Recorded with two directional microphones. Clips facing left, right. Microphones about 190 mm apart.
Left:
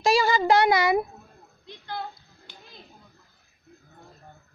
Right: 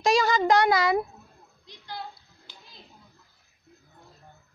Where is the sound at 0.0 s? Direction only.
5° left (ahead or behind).